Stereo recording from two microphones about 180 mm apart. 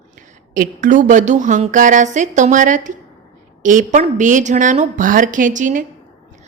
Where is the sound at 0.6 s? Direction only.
45° right (ahead or behind).